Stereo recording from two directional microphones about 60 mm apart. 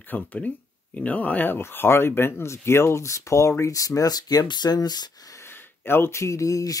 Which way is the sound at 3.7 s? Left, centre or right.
Left.